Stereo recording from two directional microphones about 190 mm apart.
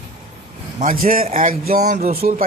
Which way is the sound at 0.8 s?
45° right (ahead or behind).